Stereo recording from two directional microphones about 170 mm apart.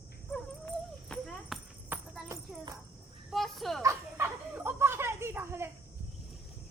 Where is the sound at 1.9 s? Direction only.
10° right (ahead or behind).